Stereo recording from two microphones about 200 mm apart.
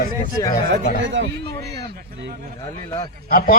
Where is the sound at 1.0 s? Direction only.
65° right (ahead or behind).